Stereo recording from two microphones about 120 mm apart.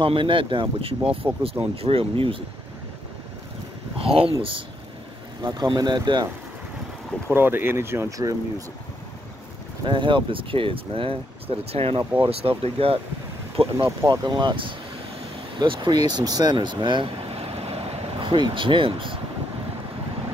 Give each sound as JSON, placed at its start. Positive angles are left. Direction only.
{"t": 0.0, "sound": "speech", "side_deg": -45}
{"t": 4.0, "sound": "speech", "side_deg": -50}
{"t": 5.4, "sound": "speech", "side_deg": -35}
{"t": 7.2, "sound": "speech", "side_deg": -15}
{"t": 9.8, "sound": "speech", "side_deg": -45}
{"t": 14.0, "sound": "speech", "side_deg": -35}